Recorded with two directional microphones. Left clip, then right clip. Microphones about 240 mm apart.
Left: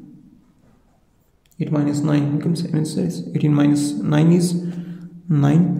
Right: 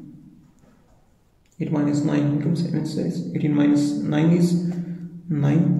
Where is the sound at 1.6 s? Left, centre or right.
Left.